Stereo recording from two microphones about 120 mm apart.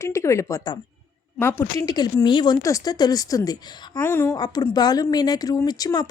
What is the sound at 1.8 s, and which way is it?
Speech, 30° left (ahead or behind).